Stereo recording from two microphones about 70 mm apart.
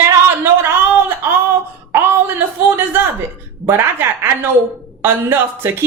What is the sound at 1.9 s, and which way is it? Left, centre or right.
Speech, right.